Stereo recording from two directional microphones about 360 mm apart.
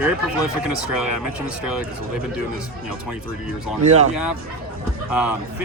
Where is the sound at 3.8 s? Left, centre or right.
Centre.